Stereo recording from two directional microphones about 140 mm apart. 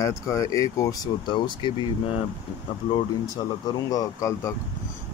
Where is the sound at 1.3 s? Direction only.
35° left (ahead or behind).